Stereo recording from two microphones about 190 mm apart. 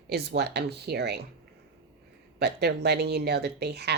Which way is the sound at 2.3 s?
60° right (ahead or behind).